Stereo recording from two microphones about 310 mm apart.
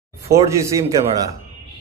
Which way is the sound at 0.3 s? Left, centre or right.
Centre.